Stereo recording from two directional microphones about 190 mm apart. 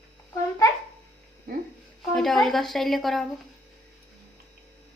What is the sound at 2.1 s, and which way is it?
A woman's voice, centre (ahead or behind).